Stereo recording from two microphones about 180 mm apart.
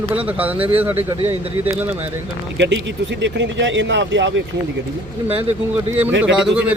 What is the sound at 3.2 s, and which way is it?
Speech, 85° right.